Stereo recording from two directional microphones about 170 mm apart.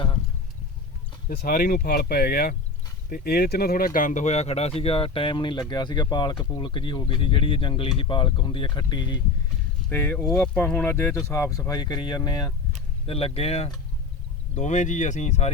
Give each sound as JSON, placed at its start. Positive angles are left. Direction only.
{"t": 1.3, "sound": "speech", "side_deg": 65}
{"t": 9.9, "sound": "speech", "side_deg": 10}
{"t": 13.1, "sound": "speech", "side_deg": 35}